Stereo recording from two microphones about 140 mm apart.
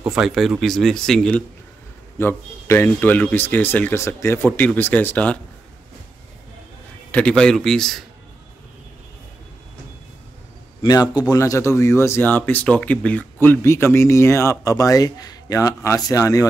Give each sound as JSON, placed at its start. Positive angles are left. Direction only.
{"t": 0.1, "sound": "speech", "side_deg": 0}
{"t": 2.1, "sound": "speech", "side_deg": 15}
{"t": 7.1, "sound": "speech", "side_deg": 10}
{"t": 10.8, "sound": "speech", "side_deg": 30}